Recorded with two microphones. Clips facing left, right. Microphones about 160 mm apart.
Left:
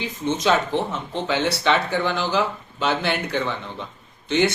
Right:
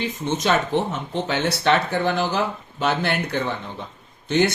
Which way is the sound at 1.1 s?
50° right (ahead or behind).